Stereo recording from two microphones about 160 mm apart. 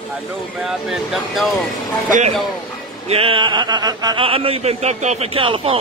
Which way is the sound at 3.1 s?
35° right (ahead or behind).